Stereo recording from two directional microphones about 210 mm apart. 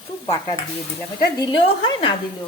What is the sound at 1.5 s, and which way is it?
Speech, 20° left (ahead or behind).